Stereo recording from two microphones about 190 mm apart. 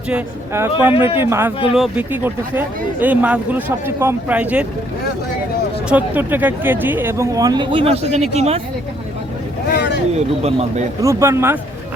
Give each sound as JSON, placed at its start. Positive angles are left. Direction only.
{"t": 0.1, "sound": "speech", "side_deg": -10}
{"t": 5.9, "sound": "speech", "side_deg": -10}
{"t": 9.7, "sound": "vehicle", "side_deg": 65}
{"t": 10.2, "sound": "speech", "side_deg": -35}
{"t": 11.0, "sound": "speech", "side_deg": -15}